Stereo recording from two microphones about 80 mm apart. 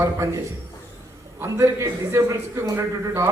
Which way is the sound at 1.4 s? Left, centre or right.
Right.